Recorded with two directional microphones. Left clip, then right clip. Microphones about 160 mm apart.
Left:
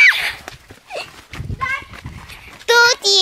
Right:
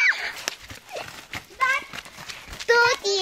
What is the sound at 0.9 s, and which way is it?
Horse, 50° left (ahead or behind).